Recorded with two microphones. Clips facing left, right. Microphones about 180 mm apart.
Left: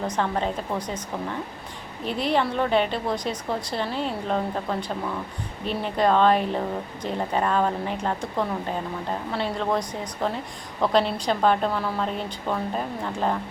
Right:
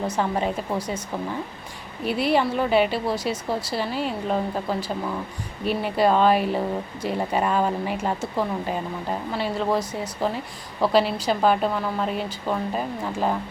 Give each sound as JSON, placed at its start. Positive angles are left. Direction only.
{"t": 0.1, "sound": "speech", "side_deg": -10}
{"t": 2.0, "sound": "a woman's voice", "side_deg": -10}